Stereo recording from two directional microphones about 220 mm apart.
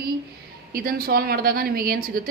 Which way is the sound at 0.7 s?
40° right (ahead or behind).